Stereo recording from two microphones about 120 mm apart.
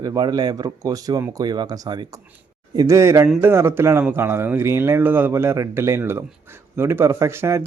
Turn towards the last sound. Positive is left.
turn(degrees=-20)  # may be behind; listen again after turning